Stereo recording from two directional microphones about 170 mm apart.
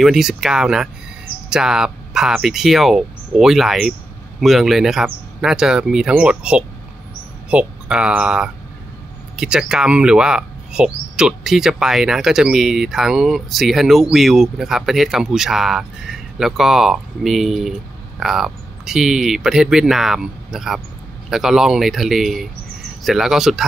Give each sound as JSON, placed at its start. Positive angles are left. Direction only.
{"t": 0.0, "sound": "speech", "side_deg": -5}